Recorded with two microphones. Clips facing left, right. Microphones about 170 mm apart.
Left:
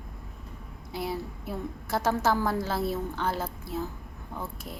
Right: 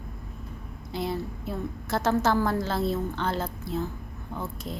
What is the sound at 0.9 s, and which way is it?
A woman's voice, 5° left (ahead or behind).